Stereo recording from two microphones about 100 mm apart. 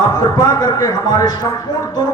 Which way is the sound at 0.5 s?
45° left (ahead or behind).